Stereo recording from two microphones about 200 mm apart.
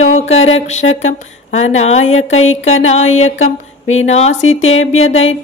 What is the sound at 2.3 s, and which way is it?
Speech, 90° left.